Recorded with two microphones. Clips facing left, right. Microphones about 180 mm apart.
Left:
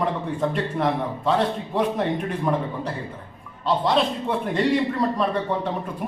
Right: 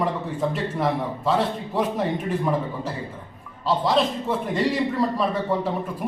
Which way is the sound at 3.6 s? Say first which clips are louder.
Even; centre (ahead or behind).